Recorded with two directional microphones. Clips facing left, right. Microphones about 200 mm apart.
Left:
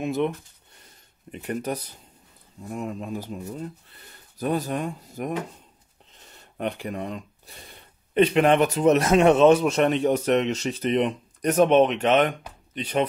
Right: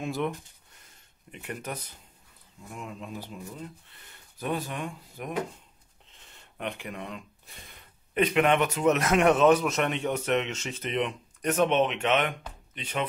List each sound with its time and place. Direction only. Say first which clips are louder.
0.0 s speech: left 6 dB; 20° left (ahead or behind)
1.3 s speech: left 8 dB; 40° left (ahead or behind)